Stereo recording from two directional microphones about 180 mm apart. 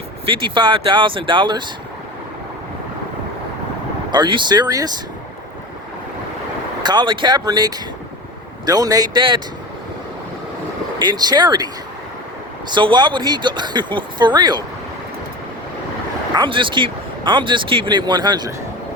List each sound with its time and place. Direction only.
0.3 s speech: 25° right (ahead or behind)
4.1 s speech: 25° right (ahead or behind)
6.8 s speech: 25° right (ahead or behind)
11.0 s speech: 25° right (ahead or behind)
16.3 s speech: 25° right (ahead or behind)